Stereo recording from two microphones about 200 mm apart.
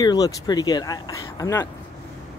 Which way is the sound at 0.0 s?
20° left (ahead or behind).